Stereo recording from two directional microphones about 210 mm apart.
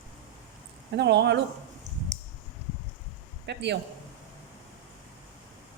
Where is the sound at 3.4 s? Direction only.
55° right (ahead or behind).